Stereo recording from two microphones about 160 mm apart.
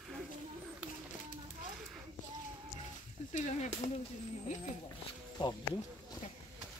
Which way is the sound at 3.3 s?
45° left (ahead or behind).